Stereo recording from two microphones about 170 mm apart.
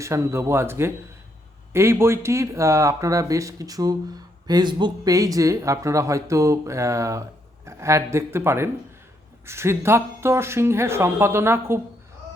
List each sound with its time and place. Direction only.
0.0 s speech: 15° right (ahead or behind)